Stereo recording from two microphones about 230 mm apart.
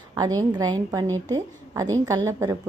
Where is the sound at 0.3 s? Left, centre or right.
Centre.